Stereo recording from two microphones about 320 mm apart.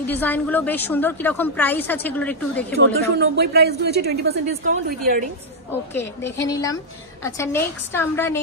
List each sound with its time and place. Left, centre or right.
0.0 s a woman's voice: centre
3.2 s a woman's voice: right
5.7 s a woman's voice: centre